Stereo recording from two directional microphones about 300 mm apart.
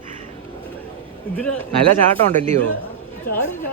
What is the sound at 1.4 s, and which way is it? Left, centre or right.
Speech, centre.